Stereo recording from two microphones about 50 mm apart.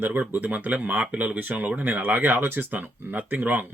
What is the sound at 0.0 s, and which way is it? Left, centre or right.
Speech, right.